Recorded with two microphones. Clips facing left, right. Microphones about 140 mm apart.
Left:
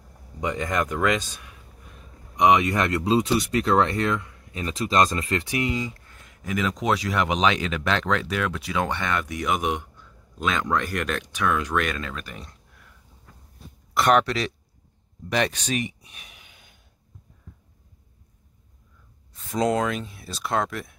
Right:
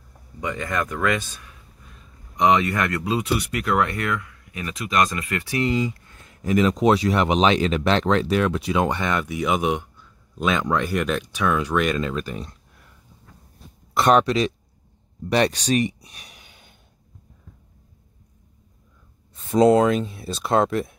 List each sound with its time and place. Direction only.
0.4 s speech: 20° left (ahead or behind)
6.4 s speech: 35° right (ahead or behind)
13.9 s speech: 25° right (ahead or behind)
15.2 s speech: 35° right (ahead or behind)
19.3 s speech: 25° right (ahead or behind)